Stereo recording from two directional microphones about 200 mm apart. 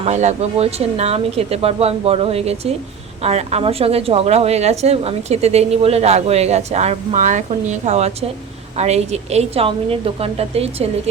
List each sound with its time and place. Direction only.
0.0 s a woman's voice: 35° right (ahead or behind)